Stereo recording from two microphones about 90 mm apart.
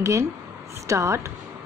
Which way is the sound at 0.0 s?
35° right (ahead or behind).